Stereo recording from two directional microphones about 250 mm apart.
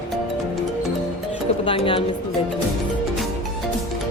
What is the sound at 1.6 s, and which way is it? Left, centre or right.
Music, left.